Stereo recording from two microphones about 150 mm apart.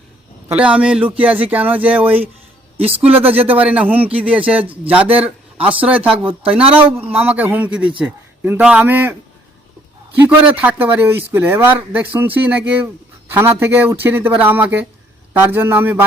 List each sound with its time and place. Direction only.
0.5 s a man's voice: 10° right (ahead or behind)
2.8 s speech: 40° right (ahead or behind)
3.5 s a man's voice: 10° right (ahead or behind)
10.2 s a man's voice: 10° right (ahead or behind)